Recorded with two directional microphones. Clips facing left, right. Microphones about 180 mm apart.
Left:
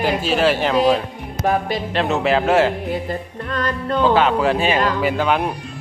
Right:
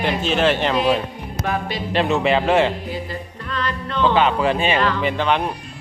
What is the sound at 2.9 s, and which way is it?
Yodeling, 50° left (ahead or behind).